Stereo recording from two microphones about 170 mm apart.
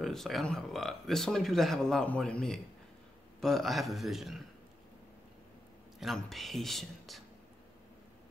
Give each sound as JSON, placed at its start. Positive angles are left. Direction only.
{"t": 0.0, "sound": "speech", "side_deg": 0}
{"t": 5.9, "sound": "speech", "side_deg": 0}